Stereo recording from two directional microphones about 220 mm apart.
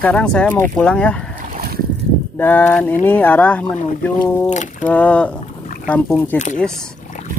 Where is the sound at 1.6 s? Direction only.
45° right (ahead or behind).